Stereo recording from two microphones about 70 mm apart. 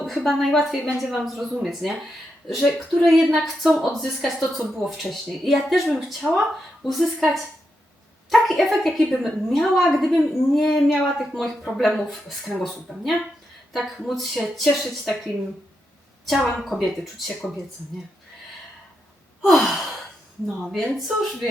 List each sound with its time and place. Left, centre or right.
0.0 s a woman's voice: centre
16.6 s speech: centre
19.4 s speech: centre